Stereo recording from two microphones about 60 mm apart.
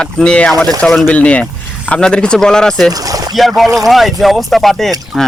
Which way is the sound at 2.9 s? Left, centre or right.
Right.